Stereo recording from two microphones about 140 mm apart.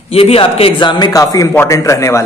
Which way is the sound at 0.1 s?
45° left (ahead or behind).